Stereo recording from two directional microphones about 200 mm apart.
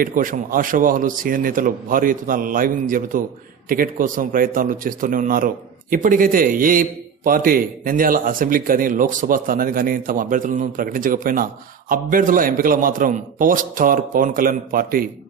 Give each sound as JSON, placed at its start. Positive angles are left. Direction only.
{"t": 0.0, "sound": "a man's voice", "side_deg": -40}